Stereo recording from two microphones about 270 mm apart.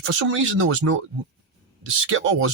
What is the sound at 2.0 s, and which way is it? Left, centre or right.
Speech, right.